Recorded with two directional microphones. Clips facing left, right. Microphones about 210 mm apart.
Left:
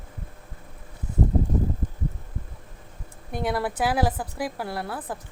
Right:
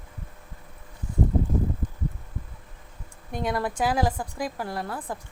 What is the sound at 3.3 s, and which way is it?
A woman's voice, 10° left (ahead or behind).